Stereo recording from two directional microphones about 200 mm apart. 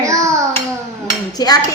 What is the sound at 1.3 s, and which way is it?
Dishes, 20° left (ahead or behind).